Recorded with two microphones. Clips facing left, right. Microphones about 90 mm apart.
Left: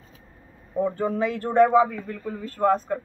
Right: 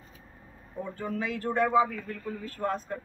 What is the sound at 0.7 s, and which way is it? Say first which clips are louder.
A man's voice: left 10 dB; 40° left (ahead or behind).